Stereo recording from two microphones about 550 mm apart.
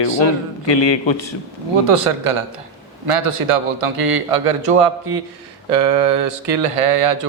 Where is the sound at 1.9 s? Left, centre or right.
Right.